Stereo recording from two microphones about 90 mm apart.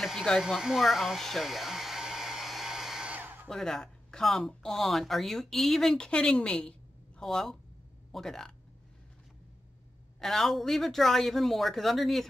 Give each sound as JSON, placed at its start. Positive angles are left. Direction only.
{"t": 0.0, "sound": "hair dryer", "side_deg": 0}
{"t": 3.1, "sound": "a sound", "side_deg": -20}
{"t": 3.4, "sound": "speech", "side_deg": 5}
{"t": 10.2, "sound": "speech", "side_deg": 5}